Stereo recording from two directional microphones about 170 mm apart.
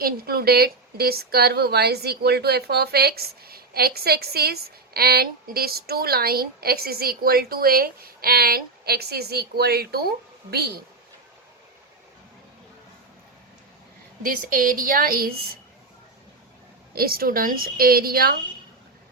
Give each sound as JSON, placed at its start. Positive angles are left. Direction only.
{"t": 0.0, "sound": "a woman's voice", "side_deg": -65}
{"t": 14.2, "sound": "a woman's voice", "side_deg": -55}
{"t": 16.9, "sound": "a woman's voice", "side_deg": -65}